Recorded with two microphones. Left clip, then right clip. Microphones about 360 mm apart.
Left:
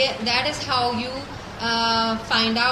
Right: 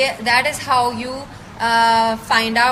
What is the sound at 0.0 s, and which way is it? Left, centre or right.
A woman's voice, right.